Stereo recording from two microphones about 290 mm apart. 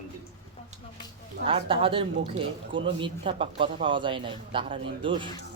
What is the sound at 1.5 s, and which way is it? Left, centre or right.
A man's voice, centre.